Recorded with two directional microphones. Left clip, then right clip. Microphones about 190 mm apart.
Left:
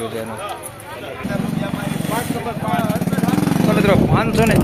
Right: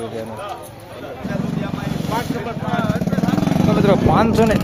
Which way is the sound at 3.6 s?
20° right (ahead or behind).